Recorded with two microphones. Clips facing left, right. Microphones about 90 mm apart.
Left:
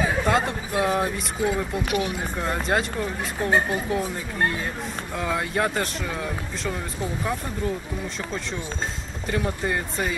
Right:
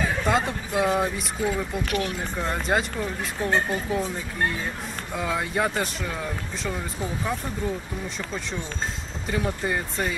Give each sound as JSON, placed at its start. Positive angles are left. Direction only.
{"t": 0.0, "sound": "speech", "side_deg": 5}
{"t": 1.9, "sound": "speech", "side_deg": 15}
{"t": 2.3, "sound": "speech", "side_deg": 0}
{"t": 9.3, "sound": "speech", "side_deg": 0}